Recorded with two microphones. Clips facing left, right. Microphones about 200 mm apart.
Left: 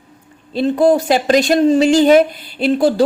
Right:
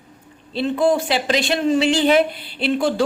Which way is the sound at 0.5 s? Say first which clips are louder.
Left 5 dB; 40° left (ahead or behind).